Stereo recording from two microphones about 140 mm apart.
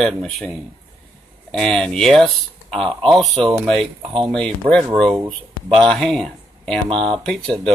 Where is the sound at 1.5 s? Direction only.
5° left (ahead or behind).